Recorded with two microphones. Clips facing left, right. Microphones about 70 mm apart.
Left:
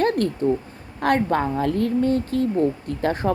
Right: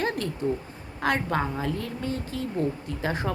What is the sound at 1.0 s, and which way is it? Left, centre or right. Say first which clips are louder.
A woman's voice: left 6 dB; left.